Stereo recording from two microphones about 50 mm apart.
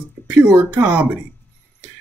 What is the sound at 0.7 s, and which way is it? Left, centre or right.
Speech, right.